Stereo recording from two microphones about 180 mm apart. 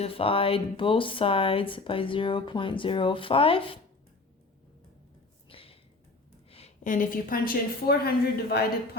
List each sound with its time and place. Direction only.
0.0 s speech: 30° left (ahead or behind)
5.5 s a sound: 30° left (ahead or behind)
6.8 s speech: 50° left (ahead or behind)